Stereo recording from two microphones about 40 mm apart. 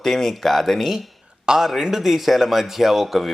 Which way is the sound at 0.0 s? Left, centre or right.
Centre.